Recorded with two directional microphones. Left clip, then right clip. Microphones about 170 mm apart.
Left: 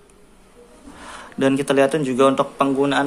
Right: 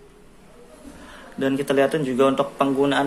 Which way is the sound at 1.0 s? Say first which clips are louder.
Left 5 dB; 25° left (ahead or behind).